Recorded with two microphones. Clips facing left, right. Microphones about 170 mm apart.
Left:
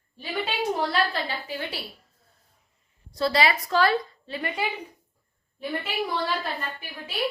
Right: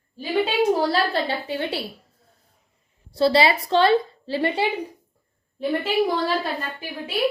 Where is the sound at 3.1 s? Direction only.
30° right (ahead or behind).